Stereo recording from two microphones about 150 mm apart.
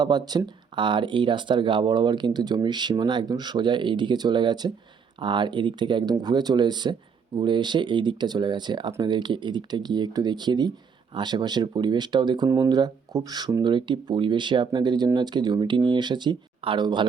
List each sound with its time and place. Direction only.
0.0 s speech: 30° right (ahead or behind)